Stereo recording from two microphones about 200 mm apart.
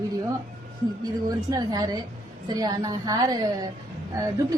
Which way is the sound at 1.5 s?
20° right (ahead or behind).